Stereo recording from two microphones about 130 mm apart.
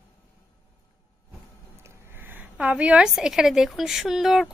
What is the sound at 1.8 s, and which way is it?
A woman's voice, 15° right (ahead or behind).